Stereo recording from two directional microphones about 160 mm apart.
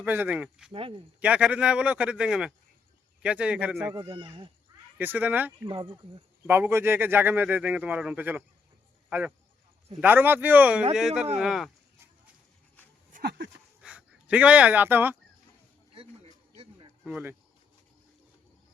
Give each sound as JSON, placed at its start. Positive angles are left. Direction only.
{"t": 0.0, "sound": "speech", "side_deg": -10}
{"t": 0.7, "sound": "speech", "side_deg": -35}
{"t": 1.2, "sound": "speech", "side_deg": -5}
{"t": 3.9, "sound": "speech", "side_deg": -30}
{"t": 4.9, "sound": "speech", "side_deg": -10}
{"t": 6.5, "sound": "speech", "side_deg": -15}
{"t": 13.1, "sound": "speech", "side_deg": -90}
{"t": 13.8, "sound": "speech", "side_deg": -5}
{"t": 16.0, "sound": "a sound", "side_deg": -35}
{"t": 17.1, "sound": "speech", "side_deg": -10}